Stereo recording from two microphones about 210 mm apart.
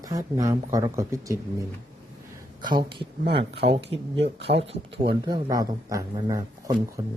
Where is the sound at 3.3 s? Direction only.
25° right (ahead or behind).